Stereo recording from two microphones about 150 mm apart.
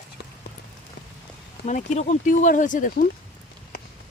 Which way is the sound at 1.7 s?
55° left (ahead or behind).